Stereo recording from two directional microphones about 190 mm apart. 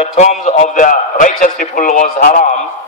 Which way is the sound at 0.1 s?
40° left (ahead or behind).